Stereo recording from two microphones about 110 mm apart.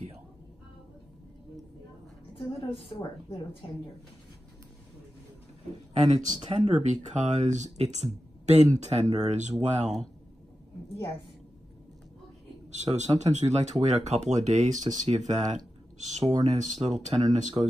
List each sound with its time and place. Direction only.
2.3 s a woman's voice: 55° left (ahead or behind)
6.0 s speech: 90° right
12.8 s speech: 90° right